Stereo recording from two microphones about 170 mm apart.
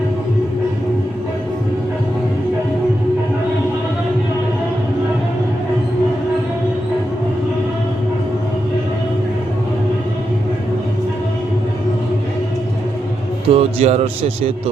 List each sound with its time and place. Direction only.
13.5 s a man's voice: 35° right (ahead or behind)